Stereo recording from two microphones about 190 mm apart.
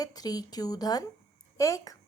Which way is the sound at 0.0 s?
20° left (ahead or behind).